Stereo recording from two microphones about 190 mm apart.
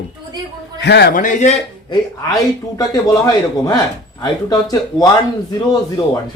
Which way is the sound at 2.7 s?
20° left (ahead or behind).